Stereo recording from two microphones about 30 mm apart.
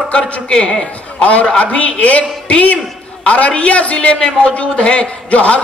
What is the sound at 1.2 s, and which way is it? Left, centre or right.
A man's voice, left.